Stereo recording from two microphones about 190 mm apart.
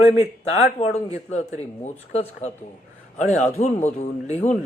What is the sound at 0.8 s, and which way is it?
Speech, 35° left (ahead or behind).